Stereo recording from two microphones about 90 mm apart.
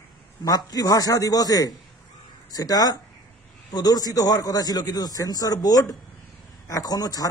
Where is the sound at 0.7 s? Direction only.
45° left (ahead or behind).